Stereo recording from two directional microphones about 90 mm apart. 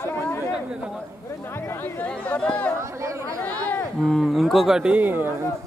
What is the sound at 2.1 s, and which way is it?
Speech, 10° left (ahead or behind).